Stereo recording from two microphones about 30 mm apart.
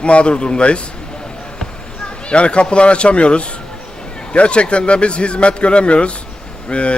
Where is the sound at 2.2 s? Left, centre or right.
Left.